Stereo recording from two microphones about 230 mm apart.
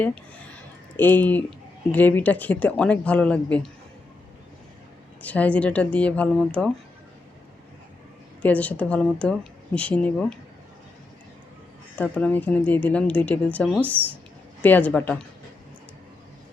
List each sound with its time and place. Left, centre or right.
0.9 s a woman's voice: centre
5.2 s speech: centre
8.4 s speech: centre
11.9 s a woman's voice: centre